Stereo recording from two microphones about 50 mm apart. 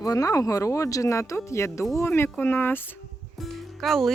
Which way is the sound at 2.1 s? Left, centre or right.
Left.